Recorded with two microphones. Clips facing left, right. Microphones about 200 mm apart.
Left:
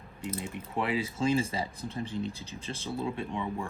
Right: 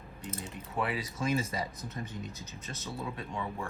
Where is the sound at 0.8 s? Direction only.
25° left (ahead or behind).